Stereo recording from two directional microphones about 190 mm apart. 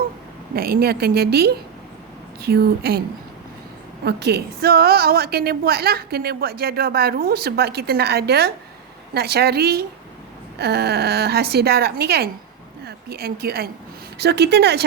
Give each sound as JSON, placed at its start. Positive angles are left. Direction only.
{"t": 0.5, "sound": "a woman's voice", "side_deg": -55}
{"t": 4.0, "sound": "a woman's voice", "side_deg": -60}